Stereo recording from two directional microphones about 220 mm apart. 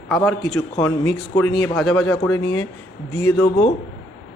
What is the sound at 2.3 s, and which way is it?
Speech, 20° left (ahead or behind).